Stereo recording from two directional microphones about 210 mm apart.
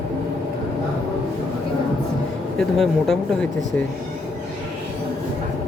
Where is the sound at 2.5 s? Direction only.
5° left (ahead or behind).